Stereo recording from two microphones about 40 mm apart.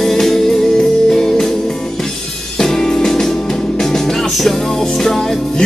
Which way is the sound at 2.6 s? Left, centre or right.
Centre.